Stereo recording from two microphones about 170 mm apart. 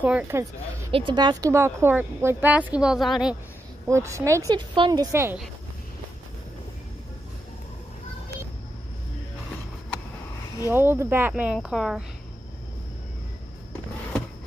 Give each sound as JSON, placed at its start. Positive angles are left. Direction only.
{"t": 0.0, "sound": "speech", "side_deg": -10}
{"t": 0.9, "sound": "speech", "side_deg": -30}
{"t": 3.8, "sound": "speech", "side_deg": -15}
{"t": 5.1, "sound": "speech", "side_deg": -15}
{"t": 10.7, "sound": "speech", "side_deg": -15}